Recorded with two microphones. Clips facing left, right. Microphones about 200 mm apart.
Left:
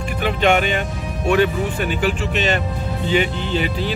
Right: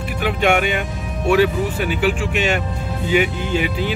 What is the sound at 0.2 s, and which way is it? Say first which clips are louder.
Speech: even; 10° right (ahead or behind).